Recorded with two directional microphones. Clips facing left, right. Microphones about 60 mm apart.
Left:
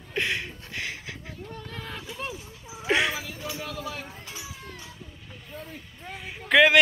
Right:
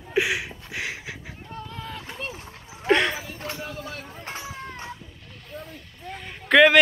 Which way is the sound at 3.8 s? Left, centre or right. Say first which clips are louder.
Even; right.